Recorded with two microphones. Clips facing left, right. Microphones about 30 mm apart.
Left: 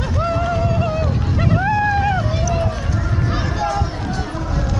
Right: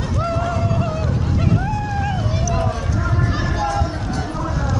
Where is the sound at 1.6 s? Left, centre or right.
Left.